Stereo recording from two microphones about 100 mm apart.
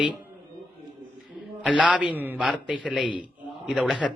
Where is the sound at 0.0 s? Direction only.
15° right (ahead or behind).